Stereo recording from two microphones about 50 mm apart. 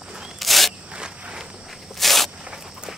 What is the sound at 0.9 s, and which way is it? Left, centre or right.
Walk, centre.